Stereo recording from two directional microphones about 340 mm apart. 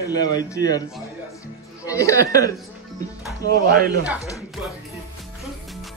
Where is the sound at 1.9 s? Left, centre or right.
Centre.